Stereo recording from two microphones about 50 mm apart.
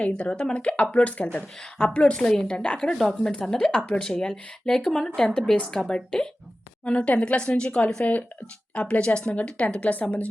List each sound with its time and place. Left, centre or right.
0.0 s speech: left